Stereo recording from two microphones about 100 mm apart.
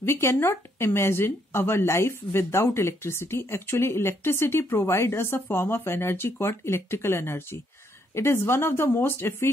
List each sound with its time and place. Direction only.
0.0 s speech: 25° left (ahead or behind)